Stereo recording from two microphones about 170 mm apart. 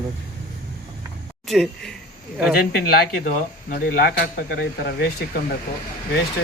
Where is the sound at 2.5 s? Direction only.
65° left (ahead or behind).